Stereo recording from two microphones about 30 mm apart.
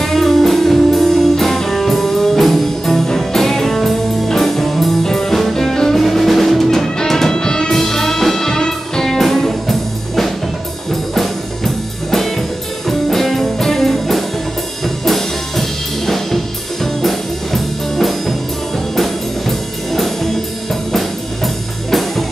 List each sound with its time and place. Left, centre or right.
0.0 s music: centre
7.3 s music: left
7.7 s music: centre
16.8 s music: centre